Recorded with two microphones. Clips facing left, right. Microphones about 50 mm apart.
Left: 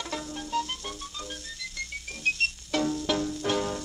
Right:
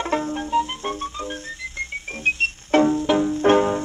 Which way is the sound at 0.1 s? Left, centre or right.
Right.